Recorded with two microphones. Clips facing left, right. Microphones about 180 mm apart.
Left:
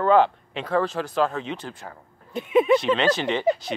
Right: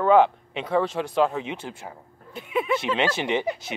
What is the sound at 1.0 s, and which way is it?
Speech, 25° right (ahead or behind).